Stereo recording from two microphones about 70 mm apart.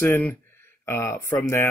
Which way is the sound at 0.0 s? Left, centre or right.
Left.